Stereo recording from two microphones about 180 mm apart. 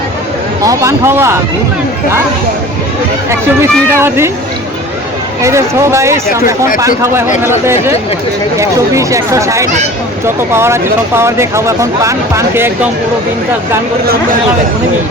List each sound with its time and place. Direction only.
0.6 s speech: 20° right (ahead or behind)
3.6 s speech: 15° right (ahead or behind)
5.4 s speech: 15° right (ahead or behind)